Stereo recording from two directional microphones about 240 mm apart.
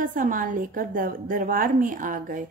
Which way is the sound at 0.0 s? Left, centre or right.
Right.